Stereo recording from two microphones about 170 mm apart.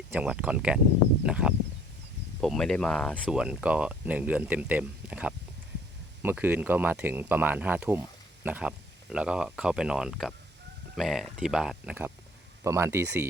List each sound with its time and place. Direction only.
0.1 s speech: 5° right (ahead or behind)